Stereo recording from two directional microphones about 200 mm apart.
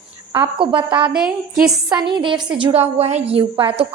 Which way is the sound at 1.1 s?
5° right (ahead or behind).